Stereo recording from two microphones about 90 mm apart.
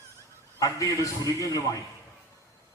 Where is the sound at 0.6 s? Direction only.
35° left (ahead or behind).